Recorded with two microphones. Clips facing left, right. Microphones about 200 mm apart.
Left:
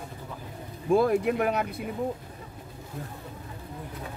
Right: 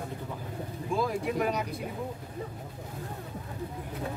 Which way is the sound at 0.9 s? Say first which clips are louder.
Left 7 dB; 60° left (ahead or behind).